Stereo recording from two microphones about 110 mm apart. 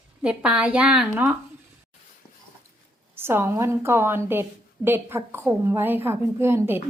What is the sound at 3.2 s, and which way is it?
A woman's voice, 20° right (ahead or behind).